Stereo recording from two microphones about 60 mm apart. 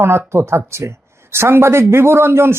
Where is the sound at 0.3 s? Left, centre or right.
Right.